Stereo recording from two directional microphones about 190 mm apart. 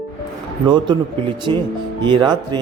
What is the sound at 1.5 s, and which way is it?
Speech, 25° right (ahead or behind).